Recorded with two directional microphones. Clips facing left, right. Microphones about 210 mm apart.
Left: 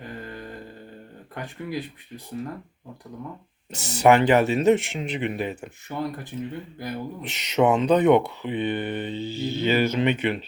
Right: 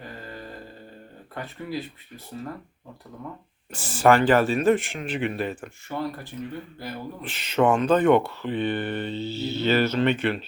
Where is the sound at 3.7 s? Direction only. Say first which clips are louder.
Left 1 dB; 20° left (ahead or behind).